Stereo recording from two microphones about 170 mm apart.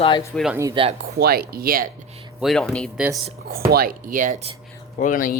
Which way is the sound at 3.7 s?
60° right (ahead or behind).